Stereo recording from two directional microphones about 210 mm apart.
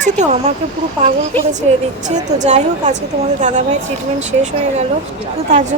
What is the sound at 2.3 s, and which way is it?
A woman's voice, 35° right (ahead or behind).